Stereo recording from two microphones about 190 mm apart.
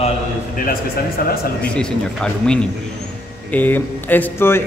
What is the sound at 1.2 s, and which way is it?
Speech, 50° left (ahead or behind).